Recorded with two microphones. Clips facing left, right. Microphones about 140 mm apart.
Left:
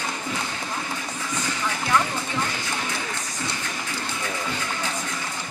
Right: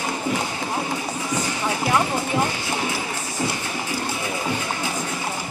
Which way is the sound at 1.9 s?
25° right (ahead or behind).